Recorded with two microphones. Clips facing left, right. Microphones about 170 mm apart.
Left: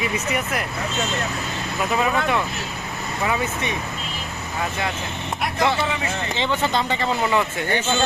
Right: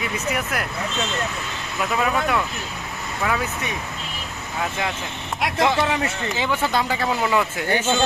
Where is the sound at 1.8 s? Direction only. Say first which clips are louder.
Even; centre (ahead or behind).